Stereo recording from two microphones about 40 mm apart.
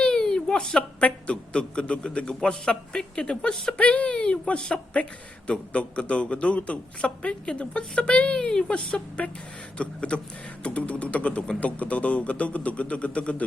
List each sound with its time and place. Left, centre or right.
0.0 s a sound: centre
0.8 s a man's voice: left
4.9 s a man's voice: left
8.4 s a man's voice: centre
9.2 s a man's voice: left